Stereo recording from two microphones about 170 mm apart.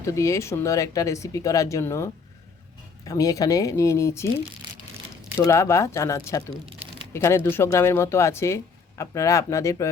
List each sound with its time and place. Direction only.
0.0 s speech: 20° left (ahead or behind)
5.4 s speech: 15° left (ahead or behind)